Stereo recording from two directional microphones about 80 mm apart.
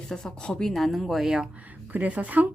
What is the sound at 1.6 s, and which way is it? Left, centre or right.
Speech, centre.